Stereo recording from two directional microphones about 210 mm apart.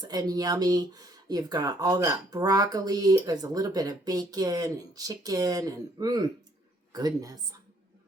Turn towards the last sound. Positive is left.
turn(degrees=-15)  # may be behind; listen again after turning